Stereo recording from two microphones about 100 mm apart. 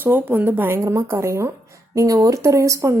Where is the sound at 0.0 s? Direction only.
20° right (ahead or behind).